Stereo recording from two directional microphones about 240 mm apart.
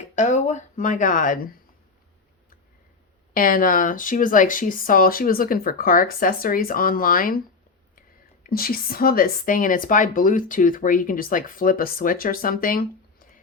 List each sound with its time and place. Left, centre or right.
0.2 s speech: left
3.3 s speech: left
8.4 s speech: left